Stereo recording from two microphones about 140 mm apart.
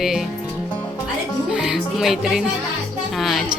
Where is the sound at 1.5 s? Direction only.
5° right (ahead or behind).